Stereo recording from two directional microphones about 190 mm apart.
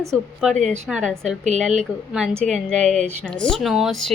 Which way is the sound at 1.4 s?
40° right (ahead or behind).